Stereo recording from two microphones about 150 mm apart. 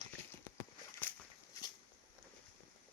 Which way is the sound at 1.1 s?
15° left (ahead or behind).